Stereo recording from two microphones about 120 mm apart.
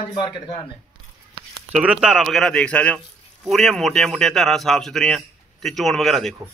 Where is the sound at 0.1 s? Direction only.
40° left (ahead or behind).